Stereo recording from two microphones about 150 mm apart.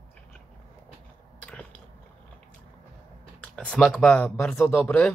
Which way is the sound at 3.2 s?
5° left (ahead or behind).